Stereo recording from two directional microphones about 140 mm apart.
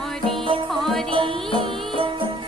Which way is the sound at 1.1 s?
40° right (ahead or behind).